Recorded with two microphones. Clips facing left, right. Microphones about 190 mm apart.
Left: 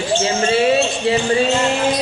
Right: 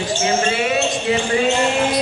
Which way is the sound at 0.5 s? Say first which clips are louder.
Left 4 dB; 30° left (ahead or behind).